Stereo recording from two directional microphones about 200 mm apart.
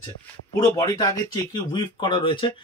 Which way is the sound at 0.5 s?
20° left (ahead or behind).